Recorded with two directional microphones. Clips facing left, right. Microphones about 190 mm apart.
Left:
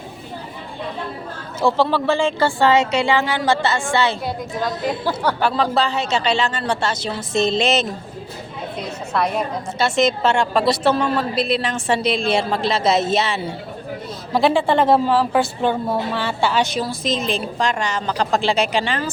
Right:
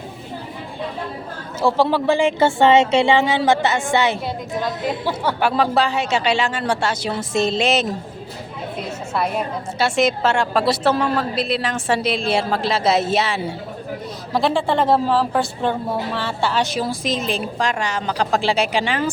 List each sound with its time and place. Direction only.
1.6 s speech: 10° right (ahead or behind)
4.6 s a woman's voice: centre (ahead or behind)
5.4 s speech: 10° right (ahead or behind)
9.1 s a woman's voice: 5° right (ahead or behind)
14.3 s a woman's voice: centre (ahead or behind)
16.8 s speech: 10° right (ahead or behind)